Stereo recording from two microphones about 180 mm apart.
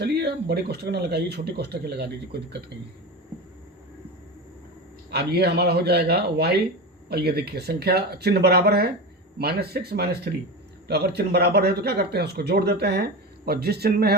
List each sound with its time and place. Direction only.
0.0 s a man's voice: 65° right (ahead or behind)
5.1 s a man's voice: 65° right (ahead or behind)